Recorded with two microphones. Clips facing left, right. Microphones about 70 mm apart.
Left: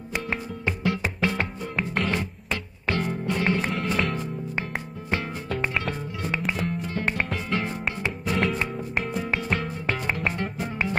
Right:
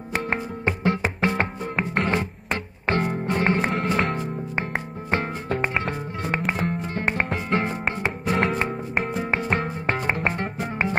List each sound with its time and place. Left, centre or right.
0.1 s music: right
3.7 s music: right